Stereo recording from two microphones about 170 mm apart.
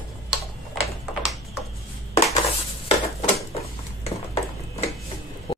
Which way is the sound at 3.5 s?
40° left (ahead or behind).